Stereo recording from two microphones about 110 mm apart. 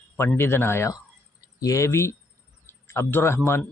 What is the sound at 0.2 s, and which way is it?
Speech, 20° left (ahead or behind).